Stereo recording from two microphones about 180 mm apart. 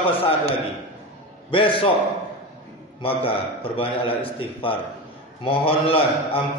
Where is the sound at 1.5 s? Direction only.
30° left (ahead or behind).